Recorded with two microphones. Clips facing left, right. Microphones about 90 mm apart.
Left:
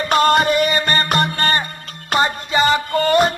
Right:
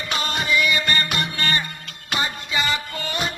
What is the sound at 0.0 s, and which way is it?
Music, 50° left (ahead or behind).